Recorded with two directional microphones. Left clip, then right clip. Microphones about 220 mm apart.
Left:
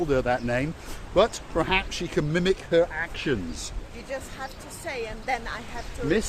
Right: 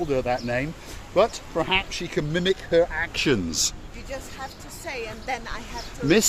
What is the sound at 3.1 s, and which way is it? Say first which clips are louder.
Speech: right 8 dB; 55° right (ahead or behind).